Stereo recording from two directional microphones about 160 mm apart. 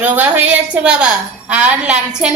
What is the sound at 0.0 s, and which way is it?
A woman's voice, 10° right (ahead or behind).